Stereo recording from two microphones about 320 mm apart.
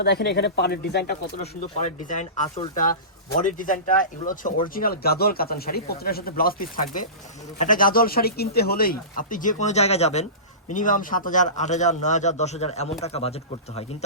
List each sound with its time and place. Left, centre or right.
0.0 s speech: left